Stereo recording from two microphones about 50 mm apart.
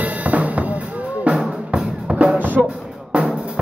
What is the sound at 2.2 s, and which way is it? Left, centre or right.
Music, right.